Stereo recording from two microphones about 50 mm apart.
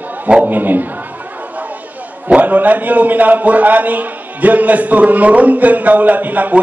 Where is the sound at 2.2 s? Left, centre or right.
Right.